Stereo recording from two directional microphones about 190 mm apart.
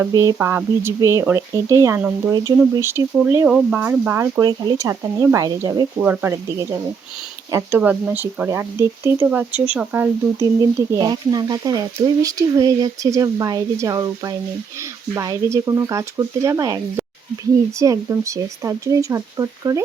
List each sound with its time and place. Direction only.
0.0 s speech: 20° right (ahead or behind)